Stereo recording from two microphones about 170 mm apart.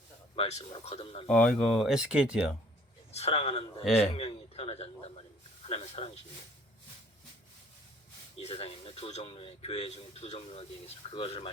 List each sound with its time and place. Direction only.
0.3 s a man's voice: 40° left (ahead or behind)
1.3 s speech: 5° left (ahead or behind)
3.1 s a man's voice: 40° left (ahead or behind)
8.4 s a man's voice: 35° left (ahead or behind)